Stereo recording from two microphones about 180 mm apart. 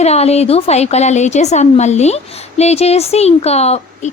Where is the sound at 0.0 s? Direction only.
35° left (ahead or behind).